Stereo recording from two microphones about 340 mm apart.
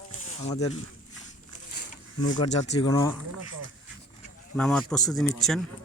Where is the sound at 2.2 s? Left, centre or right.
Left.